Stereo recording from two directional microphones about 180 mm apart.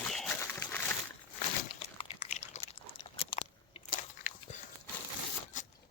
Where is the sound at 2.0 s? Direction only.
35° left (ahead or behind).